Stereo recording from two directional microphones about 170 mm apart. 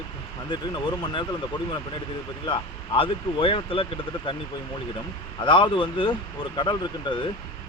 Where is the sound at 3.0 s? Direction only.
30° left (ahead or behind).